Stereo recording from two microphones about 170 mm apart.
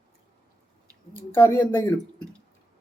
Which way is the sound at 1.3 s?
10° left (ahead or behind).